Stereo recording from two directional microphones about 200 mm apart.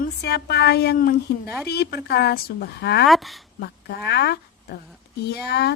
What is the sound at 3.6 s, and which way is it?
A woman's voice, 55° left (ahead or behind).